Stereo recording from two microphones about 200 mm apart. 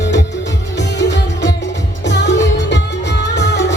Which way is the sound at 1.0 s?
60° left (ahead or behind).